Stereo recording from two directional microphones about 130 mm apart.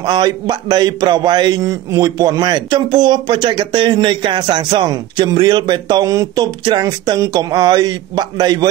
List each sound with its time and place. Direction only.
0.0 s a man's voice: 35° right (ahead or behind)